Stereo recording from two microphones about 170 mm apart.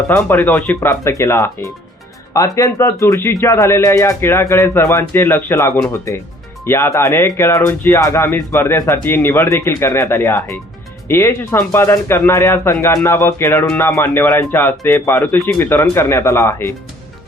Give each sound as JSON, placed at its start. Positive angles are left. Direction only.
{"t": 0.1, "sound": "speech", "side_deg": 15}